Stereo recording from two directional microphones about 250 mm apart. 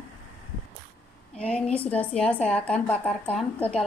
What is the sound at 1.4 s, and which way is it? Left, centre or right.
A woman's voice, centre.